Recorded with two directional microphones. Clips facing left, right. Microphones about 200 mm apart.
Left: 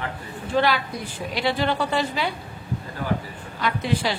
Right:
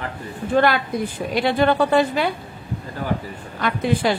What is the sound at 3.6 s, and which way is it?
Speech, 50° right (ahead or behind).